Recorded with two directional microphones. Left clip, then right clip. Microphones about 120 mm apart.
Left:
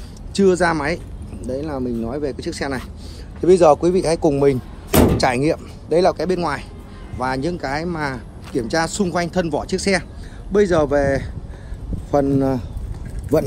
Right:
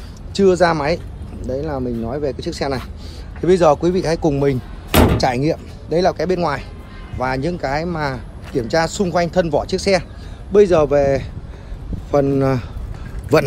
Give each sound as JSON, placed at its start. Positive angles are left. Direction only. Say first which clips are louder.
{"t": 0.3, "sound": "speech", "louder": "right 2 dB", "side_deg": 5}
{"t": 1.4, "sound": "speech", "louder": "right 2 dB", "side_deg": 15}
{"t": 2.3, "sound": "speech", "louder": "right 3 dB", "side_deg": 0}
{"t": 3.3, "sound": "speech", "louder": "left 1 dB", "side_deg": 25}
{"t": 5.1, "sound": "speech", "louder": "even", "side_deg": 55}
{"t": 6.1, "sound": "speech", "louder": "right 2 dB", "side_deg": 15}
{"t": 10.5, "sound": "a man's voice", "louder": "right 4 dB", "side_deg": -15}